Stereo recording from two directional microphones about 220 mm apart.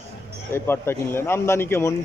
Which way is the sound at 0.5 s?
10° left (ahead or behind).